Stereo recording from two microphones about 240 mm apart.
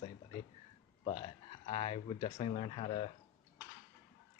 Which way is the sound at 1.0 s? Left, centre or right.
Left.